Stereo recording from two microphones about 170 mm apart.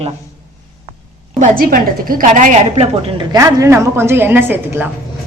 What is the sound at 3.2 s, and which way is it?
A woman's voice, 25° right (ahead or behind).